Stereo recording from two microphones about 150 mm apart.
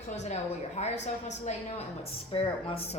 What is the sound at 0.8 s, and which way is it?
Speech, 50° left (ahead or behind).